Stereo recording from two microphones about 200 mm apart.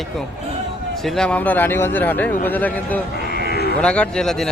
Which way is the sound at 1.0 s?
5° left (ahead or behind).